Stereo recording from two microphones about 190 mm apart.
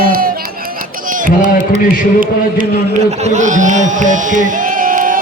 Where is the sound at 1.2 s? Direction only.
40° right (ahead or behind).